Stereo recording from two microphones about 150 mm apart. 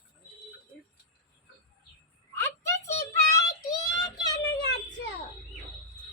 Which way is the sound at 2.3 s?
15° left (ahead or behind).